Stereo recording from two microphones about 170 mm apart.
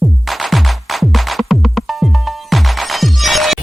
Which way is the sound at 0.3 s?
Centre (ahead or behind).